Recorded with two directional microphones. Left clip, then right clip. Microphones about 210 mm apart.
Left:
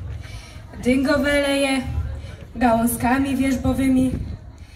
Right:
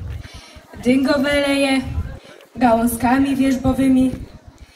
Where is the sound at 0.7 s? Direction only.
35° left (ahead or behind).